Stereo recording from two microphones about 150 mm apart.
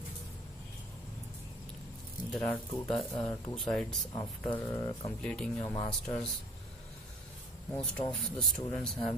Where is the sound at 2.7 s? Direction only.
40° left (ahead or behind).